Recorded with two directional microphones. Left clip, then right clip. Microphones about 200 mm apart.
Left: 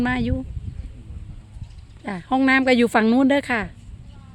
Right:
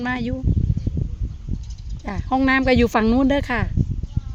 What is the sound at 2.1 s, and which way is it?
Speech, centre (ahead or behind).